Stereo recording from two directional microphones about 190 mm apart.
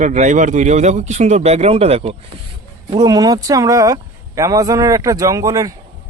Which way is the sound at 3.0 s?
20° right (ahead or behind).